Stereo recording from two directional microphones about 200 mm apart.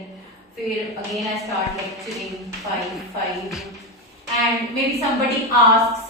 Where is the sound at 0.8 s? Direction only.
Centre (ahead or behind).